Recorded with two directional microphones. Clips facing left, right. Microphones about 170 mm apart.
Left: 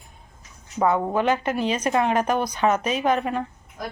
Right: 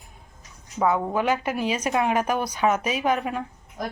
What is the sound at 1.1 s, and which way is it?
Speech, 10° right (ahead or behind).